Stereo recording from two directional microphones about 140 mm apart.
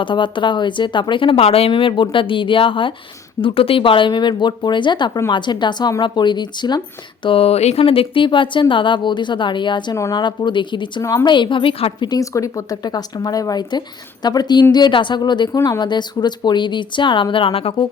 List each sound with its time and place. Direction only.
0.0 s a woman's voice: 35° left (ahead or behind)
7.3 s a woman's voice: 45° left (ahead or behind)
11.0 s a woman's voice: 25° left (ahead or behind); by 17.8 s 40° left (ahead or behind)